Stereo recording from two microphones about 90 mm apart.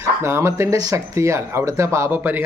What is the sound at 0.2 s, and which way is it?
Speech, 30° right (ahead or behind).